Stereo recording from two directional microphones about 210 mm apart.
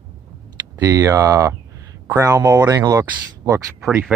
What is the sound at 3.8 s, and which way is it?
Speech, centre (ahead or behind).